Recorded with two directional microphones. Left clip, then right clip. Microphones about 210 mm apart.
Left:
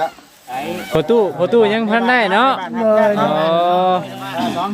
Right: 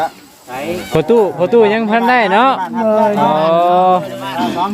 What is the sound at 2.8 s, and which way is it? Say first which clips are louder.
Speech: even; 20° left (ahead or behind).